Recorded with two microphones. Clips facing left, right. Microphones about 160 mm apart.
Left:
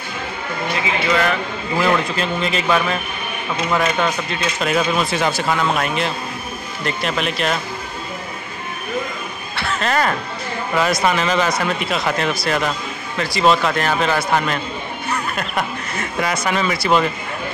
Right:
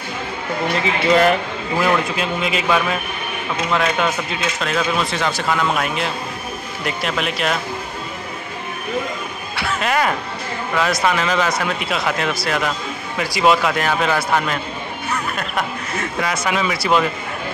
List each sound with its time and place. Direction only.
1.0 s a man's voice: 35° right (ahead or behind)
1.8 s speech: 5° right (ahead or behind)
4.6 s speech: 10° left (ahead or behind)
9.6 s speech: 10° right (ahead or behind)